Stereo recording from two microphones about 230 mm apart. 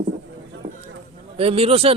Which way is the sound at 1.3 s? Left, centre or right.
Right.